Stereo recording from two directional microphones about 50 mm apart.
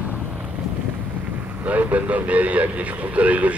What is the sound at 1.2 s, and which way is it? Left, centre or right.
Speech, right.